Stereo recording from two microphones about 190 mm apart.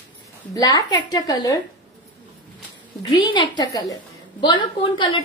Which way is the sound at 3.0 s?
20° left (ahead or behind).